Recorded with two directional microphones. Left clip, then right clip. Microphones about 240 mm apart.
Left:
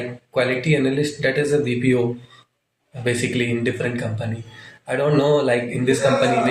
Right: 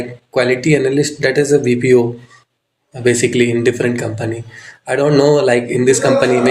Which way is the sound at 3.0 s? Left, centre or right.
Right.